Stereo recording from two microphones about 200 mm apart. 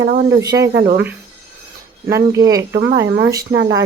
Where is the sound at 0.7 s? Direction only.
55° right (ahead or behind).